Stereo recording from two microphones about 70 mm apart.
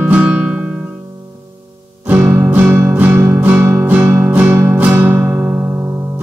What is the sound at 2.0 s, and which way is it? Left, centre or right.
Music, right.